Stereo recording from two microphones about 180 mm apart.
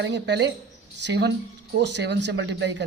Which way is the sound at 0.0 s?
75° right (ahead or behind).